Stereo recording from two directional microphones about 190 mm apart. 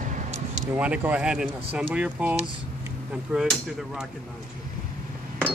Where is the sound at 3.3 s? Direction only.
Centre (ahead or behind).